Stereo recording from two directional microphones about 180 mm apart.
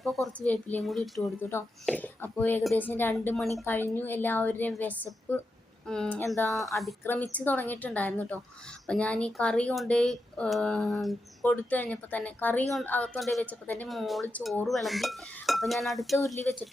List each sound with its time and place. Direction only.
0.0 s a woman's voice: centre (ahead or behind)
1.4 s a woman's voice: 10° left (ahead or behind)
6.5 s a woman's voice: centre (ahead or behind)
16.2 s a woman's voice: 15° left (ahead or behind)